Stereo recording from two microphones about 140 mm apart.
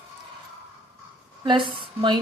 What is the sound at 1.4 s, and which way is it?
Speech, 35° right (ahead or behind).